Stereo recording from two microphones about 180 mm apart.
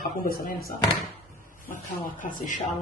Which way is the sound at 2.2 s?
45° left (ahead or behind).